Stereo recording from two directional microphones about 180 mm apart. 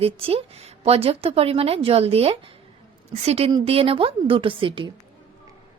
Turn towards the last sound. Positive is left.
turn(degrees=-30)  # may be behind; listen again after turning